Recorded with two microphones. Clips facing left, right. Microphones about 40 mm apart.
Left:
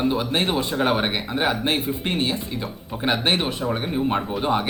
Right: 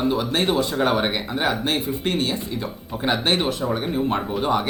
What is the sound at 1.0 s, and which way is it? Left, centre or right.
Speech, centre.